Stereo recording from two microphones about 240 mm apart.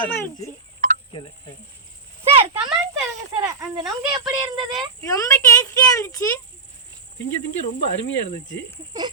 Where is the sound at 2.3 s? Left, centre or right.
Right.